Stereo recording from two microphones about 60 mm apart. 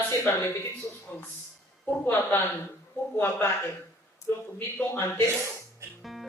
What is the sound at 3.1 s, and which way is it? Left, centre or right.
Speech, left.